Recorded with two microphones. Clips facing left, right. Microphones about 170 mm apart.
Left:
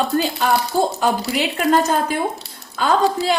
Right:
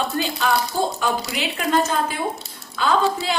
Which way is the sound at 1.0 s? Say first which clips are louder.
Left 4 dB; 35° left (ahead or behind).